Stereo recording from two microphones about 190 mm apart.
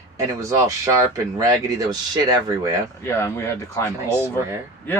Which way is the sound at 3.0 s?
15° left (ahead or behind).